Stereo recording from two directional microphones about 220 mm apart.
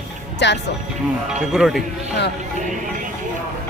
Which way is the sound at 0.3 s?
50° left (ahead or behind).